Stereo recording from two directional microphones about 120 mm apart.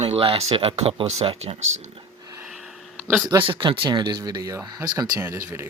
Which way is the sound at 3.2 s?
45° right (ahead or behind).